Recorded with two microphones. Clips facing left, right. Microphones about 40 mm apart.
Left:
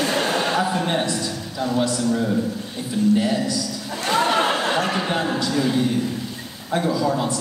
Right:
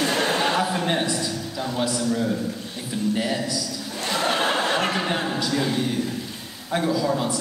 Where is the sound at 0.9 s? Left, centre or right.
Centre.